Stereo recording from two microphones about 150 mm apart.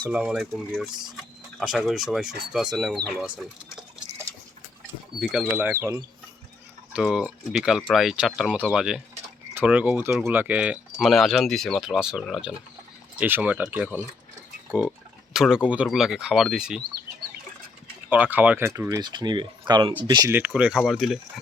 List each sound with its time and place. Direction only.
0.1 s speech: 5° right (ahead or behind)
5.2 s speech: centre (ahead or behind)
5.5 s speech: 15° right (ahead or behind)
6.9 s speech: 5° right (ahead or behind)
18.1 s speech: 10° right (ahead or behind); by 20.3 s 30° right (ahead or behind)
20.3 s speech: 10° right (ahead or behind)